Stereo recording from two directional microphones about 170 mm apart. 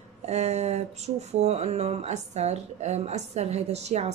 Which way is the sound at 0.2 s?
40° right (ahead or behind).